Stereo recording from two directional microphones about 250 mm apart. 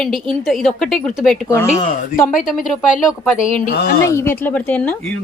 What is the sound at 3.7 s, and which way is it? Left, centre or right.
Speech, left.